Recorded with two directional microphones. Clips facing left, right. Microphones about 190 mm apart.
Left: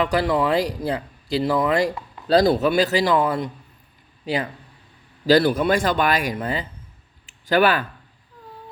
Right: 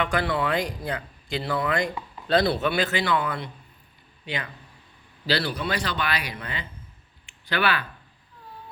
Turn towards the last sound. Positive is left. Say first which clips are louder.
# left 8 dB
turn(degrees=45)  # may be behind; listen again after turning